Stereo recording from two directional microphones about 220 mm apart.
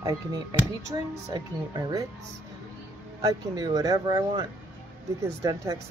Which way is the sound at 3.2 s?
15° right (ahead or behind).